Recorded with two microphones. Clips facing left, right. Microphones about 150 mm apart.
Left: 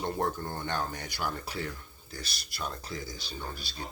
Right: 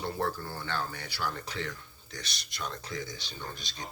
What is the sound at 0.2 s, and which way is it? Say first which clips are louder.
Speech: left 1 dB; 20° left (ahead or behind).